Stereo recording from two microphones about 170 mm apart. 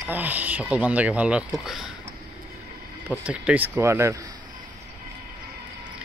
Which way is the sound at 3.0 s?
5° right (ahead or behind).